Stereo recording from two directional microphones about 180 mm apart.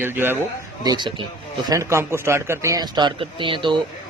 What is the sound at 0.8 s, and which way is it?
Speech, 25° right (ahead or behind).